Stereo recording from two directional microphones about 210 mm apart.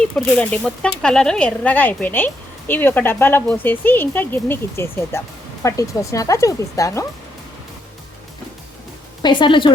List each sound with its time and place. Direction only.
0.0 s speech: centre (ahead or behind)
9.2 s a woman's voice: 20° left (ahead or behind)